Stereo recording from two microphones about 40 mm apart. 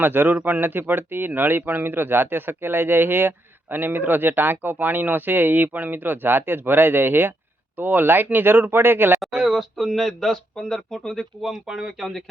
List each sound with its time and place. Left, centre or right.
0.0 s a man's voice: right
0.3 s a man's voice: right
0.6 s a man's voice: right
7.8 s a man's voice: right
9.4 s speech: centre
11.4 s speech: centre
11.9 s speech: centre